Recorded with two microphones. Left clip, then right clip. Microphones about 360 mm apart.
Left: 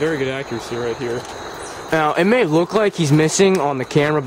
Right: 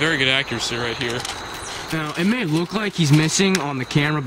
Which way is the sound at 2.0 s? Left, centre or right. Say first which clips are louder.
Left 9 dB; centre.